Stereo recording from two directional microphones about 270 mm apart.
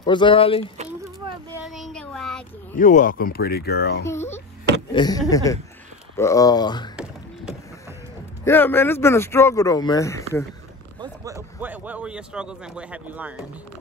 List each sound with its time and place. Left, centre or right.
0.0 s speech: centre
1.7 s child singing: centre
2.7 s speech: left
4.0 s speech: centre
8.5 s speech: centre
11.0 s a man's voice: centre